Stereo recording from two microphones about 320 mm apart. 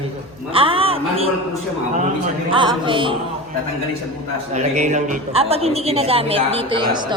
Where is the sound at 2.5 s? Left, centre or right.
Centre.